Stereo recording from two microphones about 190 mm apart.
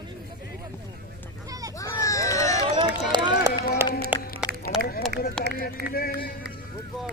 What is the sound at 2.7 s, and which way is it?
Speech, 25° right (ahead or behind).